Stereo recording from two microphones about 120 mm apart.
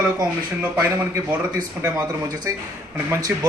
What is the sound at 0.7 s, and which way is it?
Speech, 25° right (ahead or behind).